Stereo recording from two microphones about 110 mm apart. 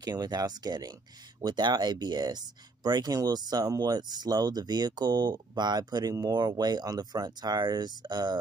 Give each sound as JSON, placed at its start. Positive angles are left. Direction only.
{"t": 0.0, "sound": "speech", "side_deg": -40}